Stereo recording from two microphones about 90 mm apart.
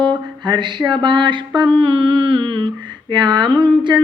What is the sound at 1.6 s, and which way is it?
Music, 75° right (ahead or behind).